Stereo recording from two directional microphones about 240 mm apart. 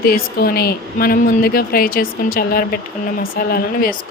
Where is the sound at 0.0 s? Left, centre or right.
Left.